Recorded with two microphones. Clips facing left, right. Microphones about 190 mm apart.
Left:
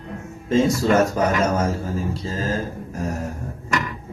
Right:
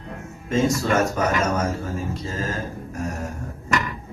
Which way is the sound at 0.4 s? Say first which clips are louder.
Left 3 dB; 30° left (ahead or behind).